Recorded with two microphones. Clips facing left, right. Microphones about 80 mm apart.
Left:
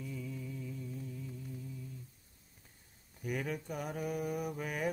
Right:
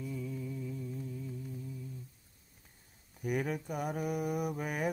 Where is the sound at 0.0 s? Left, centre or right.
Centre.